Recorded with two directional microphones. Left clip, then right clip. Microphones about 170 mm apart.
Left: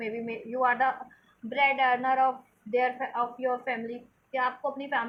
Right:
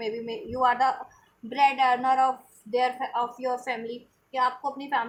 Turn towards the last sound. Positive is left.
turn(degrees=-30)  # may be behind; listen again after turning